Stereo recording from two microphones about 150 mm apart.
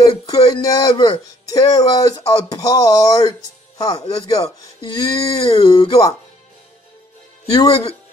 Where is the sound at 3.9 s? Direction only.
40° left (ahead or behind).